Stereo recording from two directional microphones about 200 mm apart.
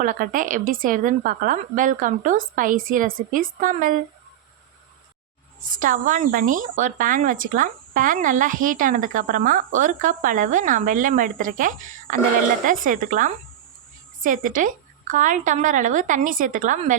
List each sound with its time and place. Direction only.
0.0 s a woman's voice: 40° right (ahead or behind)
5.6 s speech: 40° right (ahead or behind)